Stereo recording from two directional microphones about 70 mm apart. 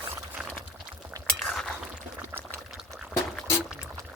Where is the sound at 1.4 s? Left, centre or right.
Centre.